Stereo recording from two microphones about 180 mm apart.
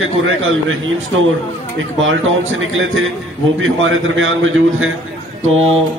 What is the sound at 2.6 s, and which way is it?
A man's voice, 90° right.